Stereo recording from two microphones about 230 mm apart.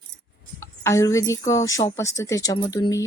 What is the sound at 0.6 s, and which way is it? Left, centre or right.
A woman's voice, centre.